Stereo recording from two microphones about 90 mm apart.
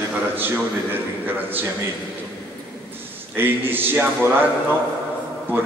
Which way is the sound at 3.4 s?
25° right (ahead or behind).